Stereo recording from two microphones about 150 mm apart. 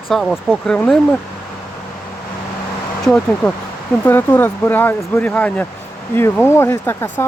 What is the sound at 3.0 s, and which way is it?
Speech, 5° left (ahead or behind).